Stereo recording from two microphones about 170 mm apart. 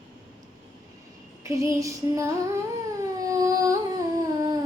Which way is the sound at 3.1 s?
20° right (ahead or behind).